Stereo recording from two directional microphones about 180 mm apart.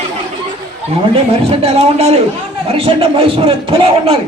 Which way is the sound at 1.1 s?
30° right (ahead or behind).